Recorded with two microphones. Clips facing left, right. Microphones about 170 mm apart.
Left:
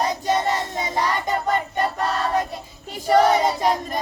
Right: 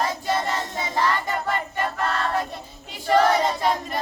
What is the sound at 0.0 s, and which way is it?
Child singing, 20° left (ahead or behind).